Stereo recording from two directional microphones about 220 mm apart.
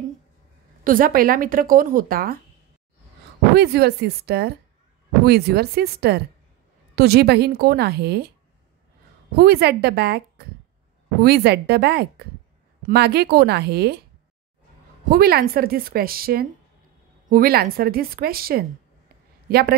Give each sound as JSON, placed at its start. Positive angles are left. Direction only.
{"t": 0.8, "sound": "a woman's voice", "side_deg": -40}
{"t": 3.5, "sound": "a woman's voice", "side_deg": -45}
{"t": 9.3, "sound": "a woman's voice", "side_deg": -45}
{"t": 15.0, "sound": "a woman's voice", "side_deg": -45}